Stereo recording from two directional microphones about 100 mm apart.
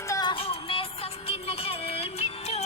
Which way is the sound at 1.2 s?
75° left (ahead or behind).